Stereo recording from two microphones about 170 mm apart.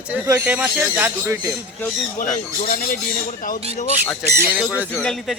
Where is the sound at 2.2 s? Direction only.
50° left (ahead or behind).